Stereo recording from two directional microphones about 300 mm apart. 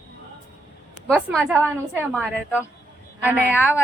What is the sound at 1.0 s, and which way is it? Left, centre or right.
Speech, centre.